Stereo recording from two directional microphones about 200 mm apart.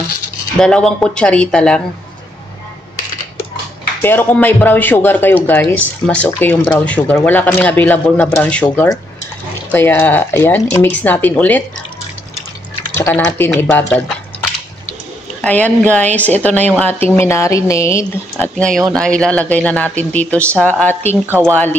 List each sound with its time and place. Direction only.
0.6 s speech: 5° left (ahead or behind)
4.0 s a woman's voice: 10° left (ahead or behind)
8.7 s a woman's voice: 20° left (ahead or behind)
12.9 s a woman's voice: 10° left (ahead or behind)
15.4 s a woman's voice: 10° left (ahead or behind)
21.3 s speech: 10° right (ahead or behind)